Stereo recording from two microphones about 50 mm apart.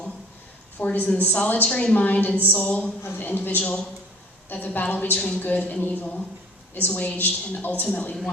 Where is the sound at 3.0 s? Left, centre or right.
Left.